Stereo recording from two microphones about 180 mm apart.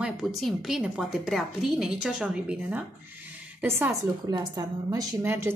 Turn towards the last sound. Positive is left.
turn(degrees=-15)  # may be behind; listen again after turning